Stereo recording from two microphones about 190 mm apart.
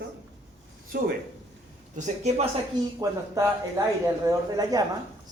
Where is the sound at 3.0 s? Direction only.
20° right (ahead or behind).